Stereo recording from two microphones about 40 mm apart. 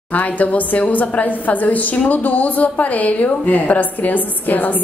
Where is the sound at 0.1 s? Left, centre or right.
Left.